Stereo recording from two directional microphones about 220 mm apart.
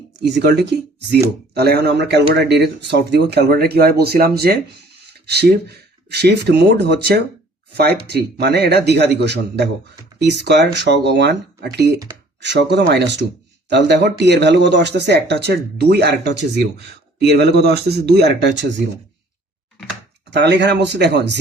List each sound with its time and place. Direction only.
0.2 s speech: 50° right (ahead or behind)
20.3 s speech: 50° right (ahead or behind)